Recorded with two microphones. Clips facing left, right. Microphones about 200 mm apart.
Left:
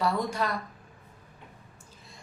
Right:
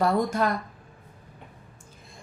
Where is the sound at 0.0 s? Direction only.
50° right (ahead or behind).